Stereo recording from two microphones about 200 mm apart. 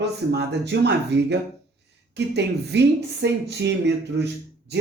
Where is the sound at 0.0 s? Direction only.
55° right (ahead or behind).